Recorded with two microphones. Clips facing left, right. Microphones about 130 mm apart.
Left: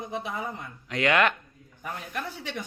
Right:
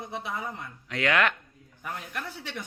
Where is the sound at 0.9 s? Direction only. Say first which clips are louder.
Left 2 dB; 5° left (ahead or behind).